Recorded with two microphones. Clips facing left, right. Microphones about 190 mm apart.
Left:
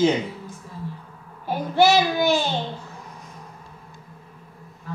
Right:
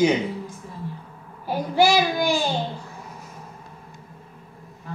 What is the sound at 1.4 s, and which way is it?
Child singing, 10° right (ahead or behind).